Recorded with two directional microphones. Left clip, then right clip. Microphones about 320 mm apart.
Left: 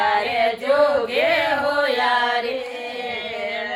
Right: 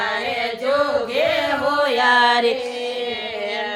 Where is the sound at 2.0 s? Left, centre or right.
Right.